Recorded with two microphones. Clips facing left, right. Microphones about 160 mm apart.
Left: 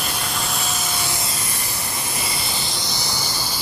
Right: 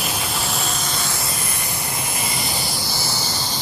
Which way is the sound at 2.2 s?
30° left (ahead or behind).